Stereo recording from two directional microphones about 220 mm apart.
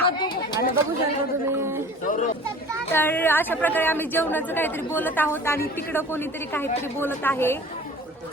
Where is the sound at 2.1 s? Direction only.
35° left (ahead or behind).